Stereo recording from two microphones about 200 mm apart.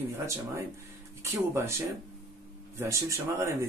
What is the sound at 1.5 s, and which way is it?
Speech, 15° right (ahead or behind).